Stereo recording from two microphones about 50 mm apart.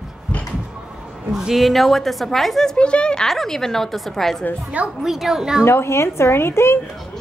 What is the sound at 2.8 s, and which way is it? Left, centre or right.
Speech, centre.